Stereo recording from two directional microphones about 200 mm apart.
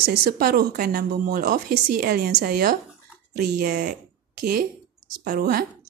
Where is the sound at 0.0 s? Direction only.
50° right (ahead or behind).